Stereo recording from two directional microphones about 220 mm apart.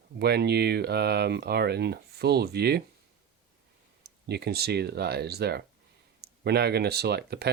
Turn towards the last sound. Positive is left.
turn(degrees=-45)  # may be behind; listen again after turning